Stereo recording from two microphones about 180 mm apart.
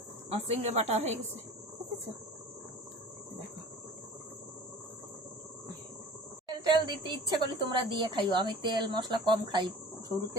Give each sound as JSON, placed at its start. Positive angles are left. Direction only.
{"t": 0.3, "sound": "a woman's voice", "side_deg": -35}
{"t": 6.5, "sound": "a woman's voice", "side_deg": -25}